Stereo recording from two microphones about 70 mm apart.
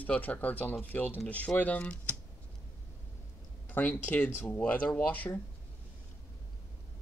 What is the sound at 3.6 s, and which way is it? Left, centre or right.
Speech, left.